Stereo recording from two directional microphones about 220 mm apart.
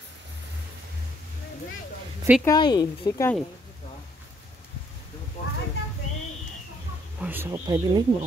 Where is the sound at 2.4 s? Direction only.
20° left (ahead or behind).